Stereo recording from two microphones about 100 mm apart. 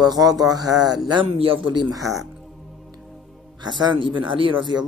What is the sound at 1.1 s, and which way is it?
Speech, 65° right (ahead or behind).